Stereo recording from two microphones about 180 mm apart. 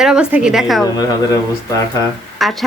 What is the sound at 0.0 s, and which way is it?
Speech, 5° right (ahead or behind).